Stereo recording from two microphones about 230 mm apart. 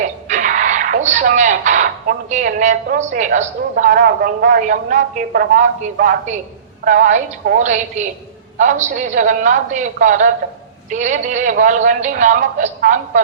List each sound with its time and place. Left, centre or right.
0.0 s speech: right